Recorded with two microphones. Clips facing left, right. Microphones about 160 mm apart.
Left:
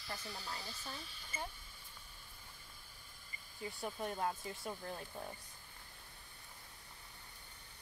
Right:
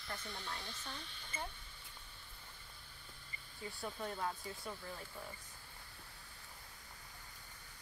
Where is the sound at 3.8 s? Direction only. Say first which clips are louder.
Left 2 dB; 15° left (ahead or behind).